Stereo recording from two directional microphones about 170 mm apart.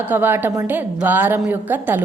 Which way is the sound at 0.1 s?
10° right (ahead or behind).